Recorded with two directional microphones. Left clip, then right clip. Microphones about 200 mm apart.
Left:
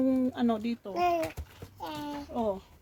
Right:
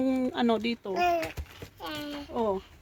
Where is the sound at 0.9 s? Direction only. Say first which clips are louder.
Right 1 dB; centre (ahead or behind).